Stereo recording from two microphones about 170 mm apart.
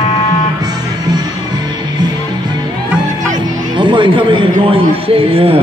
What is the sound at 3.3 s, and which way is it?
A man's voice, 30° right (ahead or behind).